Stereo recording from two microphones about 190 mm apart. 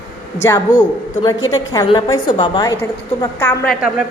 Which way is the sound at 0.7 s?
45° left (ahead or behind).